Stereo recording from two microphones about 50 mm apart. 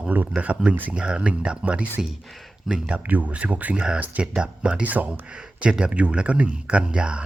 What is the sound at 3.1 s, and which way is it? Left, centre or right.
Speech, right.